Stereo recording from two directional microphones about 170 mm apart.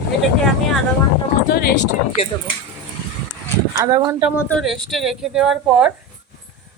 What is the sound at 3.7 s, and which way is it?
Speech, 25° right (ahead or behind).